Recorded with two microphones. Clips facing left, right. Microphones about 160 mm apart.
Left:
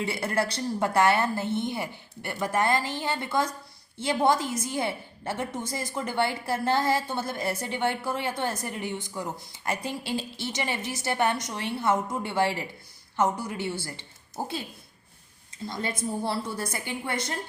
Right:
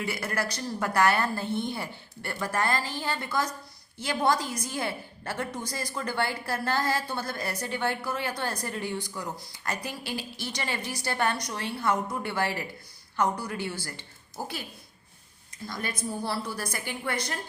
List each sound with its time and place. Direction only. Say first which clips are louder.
0.0 s a woman's voice: left 3 dB; 25° left (ahead or behind)
15.6 s a woman's voice: left 3 dB; 25° left (ahead or behind)